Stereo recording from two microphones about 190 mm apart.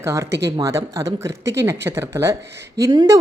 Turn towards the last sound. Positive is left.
turn(degrees=-20)  # may be behind; listen again after turning